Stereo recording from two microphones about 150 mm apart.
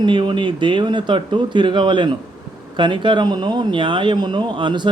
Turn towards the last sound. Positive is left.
turn(degrees=-30)  # may be behind; listen again after turning